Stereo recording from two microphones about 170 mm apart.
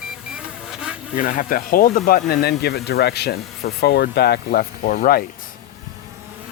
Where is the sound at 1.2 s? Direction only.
55° left (ahead or behind).